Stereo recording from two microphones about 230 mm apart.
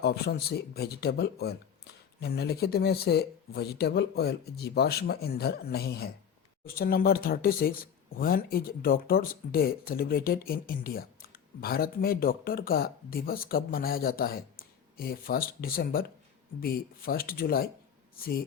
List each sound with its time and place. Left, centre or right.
0.0 s speech: left